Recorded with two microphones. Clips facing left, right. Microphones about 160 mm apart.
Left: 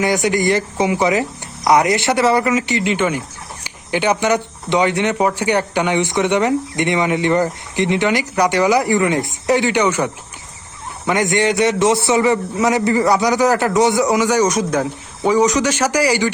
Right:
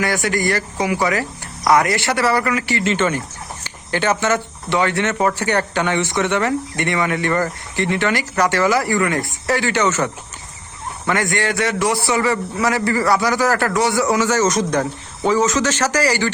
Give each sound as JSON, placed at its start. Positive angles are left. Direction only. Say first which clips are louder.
{"t": 0.0, "sound": "a man's voice", "louder": "left 3 dB", "side_deg": 20}